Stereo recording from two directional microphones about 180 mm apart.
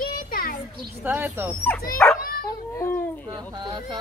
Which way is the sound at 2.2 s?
50° left (ahead or behind).